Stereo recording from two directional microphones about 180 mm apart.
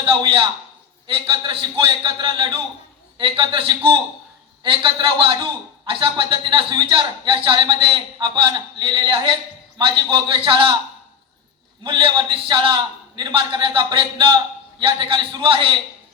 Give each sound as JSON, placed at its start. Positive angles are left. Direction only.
{"t": 0.0, "sound": "a sound", "side_deg": -25}
{"t": 1.0, "sound": "speech", "side_deg": -30}
{"t": 11.8, "sound": "speech", "side_deg": -25}